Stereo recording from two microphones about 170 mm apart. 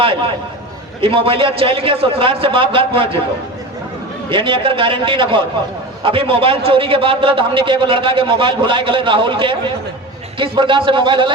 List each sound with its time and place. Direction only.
1.0 s a man's voice: 30° right (ahead or behind)
4.3 s a man's voice: 30° right (ahead or behind)